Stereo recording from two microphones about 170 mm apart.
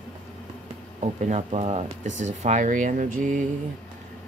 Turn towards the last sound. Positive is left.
turn(degrees=-50)  # may be behind; listen again after turning